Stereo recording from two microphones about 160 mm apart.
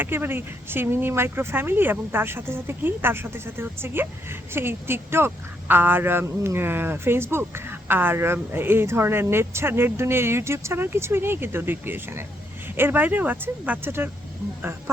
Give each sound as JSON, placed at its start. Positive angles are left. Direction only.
{"t": 0.0, "sound": "speech", "side_deg": -15}